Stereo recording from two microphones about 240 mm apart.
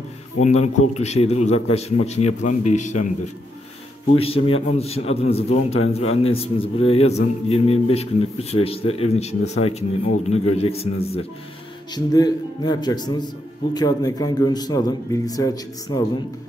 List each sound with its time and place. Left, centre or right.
0.4 s a man's voice: left
4.1 s a man's voice: left
11.9 s a man's voice: centre